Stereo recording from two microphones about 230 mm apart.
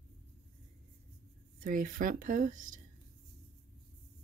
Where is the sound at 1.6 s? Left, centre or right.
Right.